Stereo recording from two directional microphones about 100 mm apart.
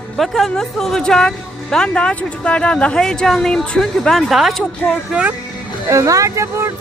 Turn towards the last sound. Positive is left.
turn(degrees=-30)  # may be behind; listen again after turning